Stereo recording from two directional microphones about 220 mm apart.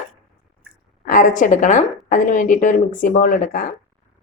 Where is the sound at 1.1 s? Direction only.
35° left (ahead or behind).